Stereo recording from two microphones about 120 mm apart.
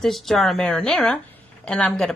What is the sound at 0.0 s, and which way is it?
Speech, centre (ahead or behind).